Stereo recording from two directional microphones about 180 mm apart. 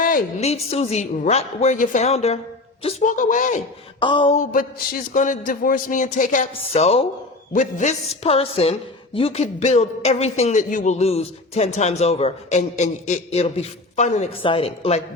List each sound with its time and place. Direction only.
0.3 s a man's voice: 35° left (ahead or behind)
4.0 s speech: 25° left (ahead or behind)
5.1 s a man's voice: 45° left (ahead or behind)
6.5 s a man's voice: 35° left (ahead or behind)